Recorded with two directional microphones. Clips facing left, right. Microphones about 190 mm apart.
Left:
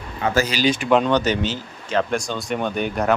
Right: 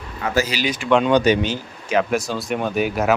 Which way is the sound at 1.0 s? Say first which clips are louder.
Right 3 dB; 10° right (ahead or behind).